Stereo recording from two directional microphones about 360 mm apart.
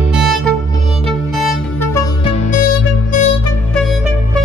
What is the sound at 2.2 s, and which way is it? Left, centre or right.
Music, centre.